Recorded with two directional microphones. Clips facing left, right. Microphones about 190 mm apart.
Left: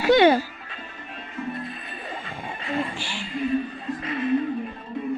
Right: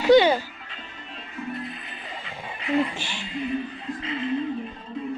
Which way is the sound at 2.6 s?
20° right (ahead or behind).